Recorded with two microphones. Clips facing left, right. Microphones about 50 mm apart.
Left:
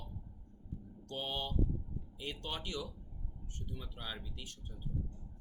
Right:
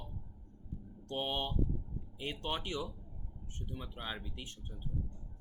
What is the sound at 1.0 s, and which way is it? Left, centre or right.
Speech, right.